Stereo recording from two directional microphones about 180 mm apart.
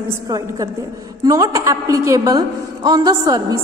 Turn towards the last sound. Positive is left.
turn(degrees=-20)  # may be behind; listen again after turning